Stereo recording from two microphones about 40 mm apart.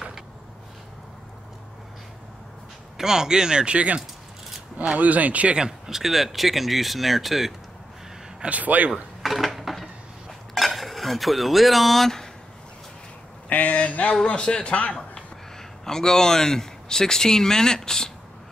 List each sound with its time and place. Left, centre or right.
3.0 s speech: centre; by 4.0 s right
4.9 s speech: right
5.6 s speech: centre
8.4 s speech: right
9.2 s a sound: centre
10.5 s speech: centre
13.5 s speech: left
14.2 s a man's voice: left
15.8 s a man's voice: centre